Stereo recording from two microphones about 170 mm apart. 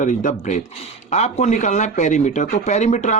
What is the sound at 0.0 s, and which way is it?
A man's voice, 45° left (ahead or behind).